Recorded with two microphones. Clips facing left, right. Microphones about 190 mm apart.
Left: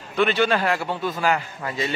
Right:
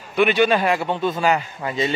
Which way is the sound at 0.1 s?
15° right (ahead or behind).